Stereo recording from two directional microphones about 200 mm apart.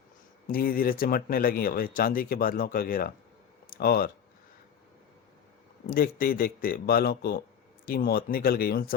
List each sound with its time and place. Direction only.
0.4 s speech: 45° left (ahead or behind)
5.8 s speech: 50° left (ahead or behind)